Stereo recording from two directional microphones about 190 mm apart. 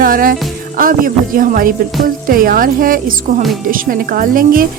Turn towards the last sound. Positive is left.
turn(degrees=-45)  # may be behind; listen again after turning